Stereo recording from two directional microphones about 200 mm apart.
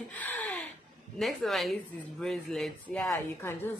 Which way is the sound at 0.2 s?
10° left (ahead or behind).